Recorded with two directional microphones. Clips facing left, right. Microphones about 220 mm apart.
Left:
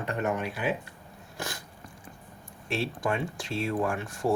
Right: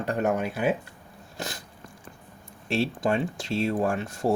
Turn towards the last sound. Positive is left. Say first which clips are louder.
# right 2 dB
turn(degrees=-30)  # may be behind; listen again after turning